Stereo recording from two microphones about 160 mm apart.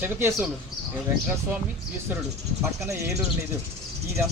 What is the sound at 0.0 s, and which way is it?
Speech, 15° right (ahead or behind).